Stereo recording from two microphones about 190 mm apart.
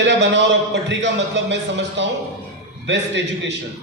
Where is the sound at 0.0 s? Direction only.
65° right (ahead or behind).